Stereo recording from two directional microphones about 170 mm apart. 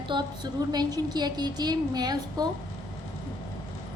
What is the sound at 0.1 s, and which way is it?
A woman's voice, 30° right (ahead or behind).